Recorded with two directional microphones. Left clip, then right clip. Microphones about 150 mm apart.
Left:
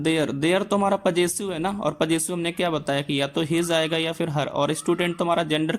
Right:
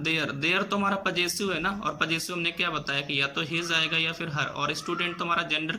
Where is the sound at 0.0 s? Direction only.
40° left (ahead or behind).